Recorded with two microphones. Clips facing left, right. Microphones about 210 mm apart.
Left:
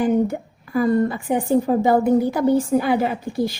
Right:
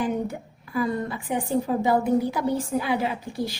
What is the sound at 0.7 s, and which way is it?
A woman's voice, 45° left (ahead or behind).